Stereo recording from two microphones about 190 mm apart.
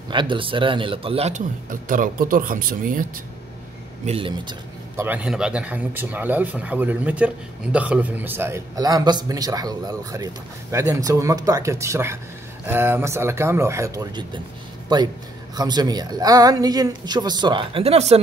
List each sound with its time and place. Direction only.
0.1 s speech: 25° right (ahead or behind); by 3.1 s 45° right (ahead or behind)
4.0 s speech: 30° right (ahead or behind)
4.9 s speech: 10° right (ahead or behind); by 18.2 s 35° right (ahead or behind)